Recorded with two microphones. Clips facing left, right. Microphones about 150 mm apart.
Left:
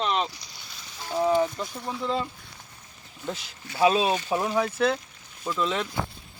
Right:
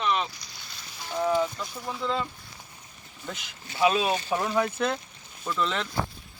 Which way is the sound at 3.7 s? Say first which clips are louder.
Left 2 dB; 30° left (ahead or behind).